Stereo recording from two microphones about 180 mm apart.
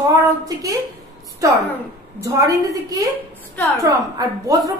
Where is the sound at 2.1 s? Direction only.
20° right (ahead or behind).